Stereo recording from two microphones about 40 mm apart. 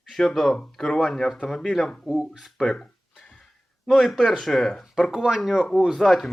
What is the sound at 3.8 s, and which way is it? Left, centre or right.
Speech, centre.